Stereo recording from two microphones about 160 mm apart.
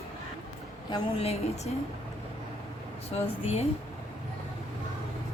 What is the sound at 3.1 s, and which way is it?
Speech, 40° left (ahead or behind).